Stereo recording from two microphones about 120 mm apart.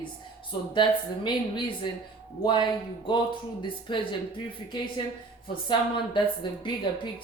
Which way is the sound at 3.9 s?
45° left (ahead or behind).